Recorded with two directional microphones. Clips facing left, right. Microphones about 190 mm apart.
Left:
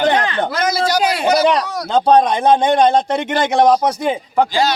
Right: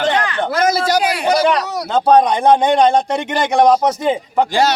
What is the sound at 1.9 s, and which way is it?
A man's voice, 5° right (ahead or behind).